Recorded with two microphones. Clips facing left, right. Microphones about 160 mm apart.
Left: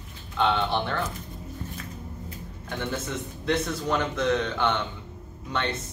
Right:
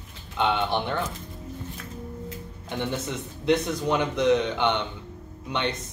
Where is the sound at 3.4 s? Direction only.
15° right (ahead or behind).